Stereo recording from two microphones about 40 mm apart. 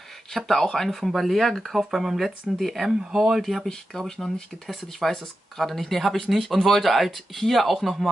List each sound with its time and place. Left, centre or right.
0.3 s speech: centre
3.0 s speech: centre
4.0 s speech: centre